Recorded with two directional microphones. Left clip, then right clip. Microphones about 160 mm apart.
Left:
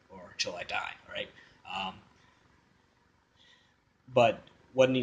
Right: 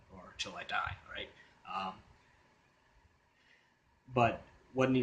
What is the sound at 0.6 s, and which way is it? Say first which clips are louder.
Speech: left 2 dB; 20° right (ahead or behind).